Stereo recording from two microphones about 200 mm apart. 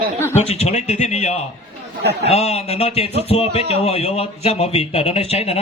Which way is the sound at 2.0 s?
55° right (ahead or behind).